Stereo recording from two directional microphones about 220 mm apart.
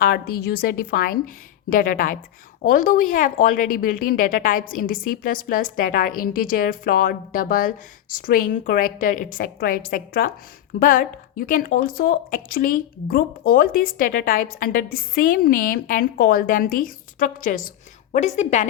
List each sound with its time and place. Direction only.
0.0 s a woman's voice: 45° left (ahead or behind)